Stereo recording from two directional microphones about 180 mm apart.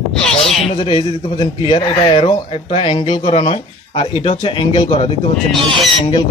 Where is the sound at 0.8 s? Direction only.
25° left (ahead or behind).